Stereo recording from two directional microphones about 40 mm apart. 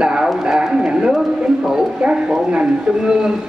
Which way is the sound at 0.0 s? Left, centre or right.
Right.